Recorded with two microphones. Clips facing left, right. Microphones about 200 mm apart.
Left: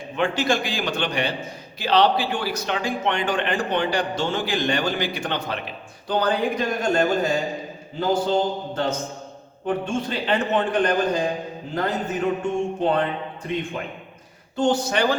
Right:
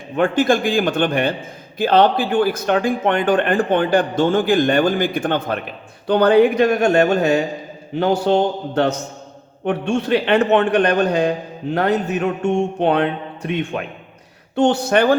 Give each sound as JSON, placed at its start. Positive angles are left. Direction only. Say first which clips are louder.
{"t": 0.2, "sound": "a man's voice", "louder": "right 6 dB", "side_deg": -50}